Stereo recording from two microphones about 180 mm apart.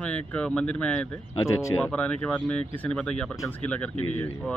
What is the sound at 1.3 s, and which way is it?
Speech, 15° left (ahead or behind).